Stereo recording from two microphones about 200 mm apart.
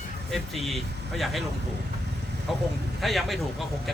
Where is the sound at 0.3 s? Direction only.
Centre (ahead or behind).